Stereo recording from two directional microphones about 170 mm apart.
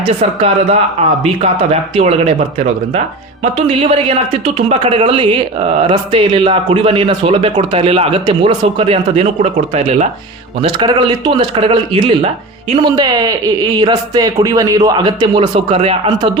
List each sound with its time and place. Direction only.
0.2 s speech: 35° right (ahead or behind)
3.7 s a man's voice: 35° right (ahead or behind)